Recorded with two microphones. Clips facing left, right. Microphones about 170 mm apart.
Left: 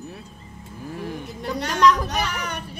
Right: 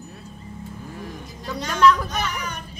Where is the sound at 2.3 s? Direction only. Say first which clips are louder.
Left 1 dB; 65° left (ahead or behind).